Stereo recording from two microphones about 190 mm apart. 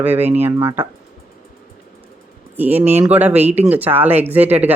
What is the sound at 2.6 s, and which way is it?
Speech, 10° right (ahead or behind).